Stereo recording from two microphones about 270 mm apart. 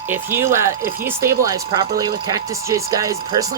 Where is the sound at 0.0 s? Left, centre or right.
Centre.